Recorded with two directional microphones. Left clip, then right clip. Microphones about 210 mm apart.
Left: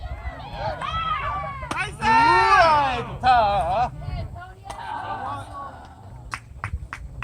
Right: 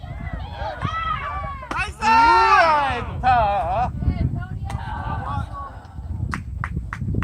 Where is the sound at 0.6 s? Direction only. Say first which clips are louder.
Right 1 dB; 5° left (ahead or behind).